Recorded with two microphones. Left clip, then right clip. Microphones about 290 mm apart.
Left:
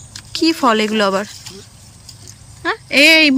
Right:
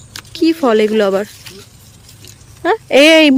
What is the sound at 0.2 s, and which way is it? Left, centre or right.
Speech, centre.